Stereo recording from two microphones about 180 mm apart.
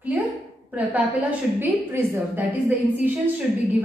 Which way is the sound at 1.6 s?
10° right (ahead or behind).